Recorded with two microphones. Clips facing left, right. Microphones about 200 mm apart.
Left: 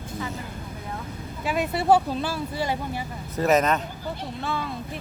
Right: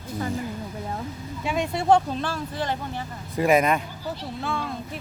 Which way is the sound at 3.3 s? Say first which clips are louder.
Right 1 dB; 10° right (ahead or behind).